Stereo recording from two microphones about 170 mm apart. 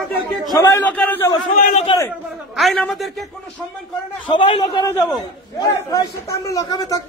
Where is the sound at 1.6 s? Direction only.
55° left (ahead or behind).